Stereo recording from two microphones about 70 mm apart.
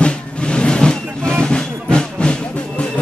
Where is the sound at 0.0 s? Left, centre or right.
Centre.